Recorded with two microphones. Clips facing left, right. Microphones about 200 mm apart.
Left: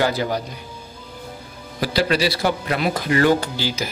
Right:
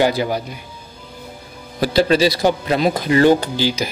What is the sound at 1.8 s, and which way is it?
Speech, 25° right (ahead or behind).